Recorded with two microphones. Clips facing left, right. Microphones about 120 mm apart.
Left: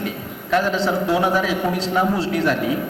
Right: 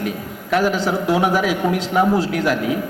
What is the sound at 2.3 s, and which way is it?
Speech, 5° right (ahead or behind).